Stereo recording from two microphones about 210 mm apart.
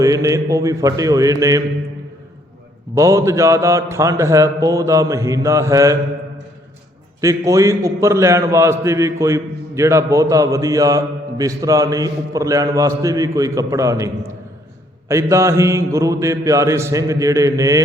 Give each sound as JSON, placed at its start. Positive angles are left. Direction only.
{"t": 0.0, "sound": "a man's voice", "side_deg": -15}
{"t": 2.9, "sound": "a man's voice", "side_deg": -15}
{"t": 7.2, "sound": "a man's voice", "side_deg": -15}